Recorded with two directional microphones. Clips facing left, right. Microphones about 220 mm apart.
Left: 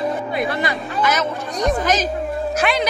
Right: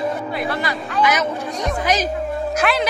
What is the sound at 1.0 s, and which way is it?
Speech, 15° right (ahead or behind).